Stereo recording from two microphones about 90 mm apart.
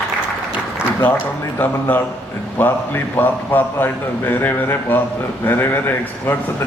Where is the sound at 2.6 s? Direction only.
20° left (ahead or behind).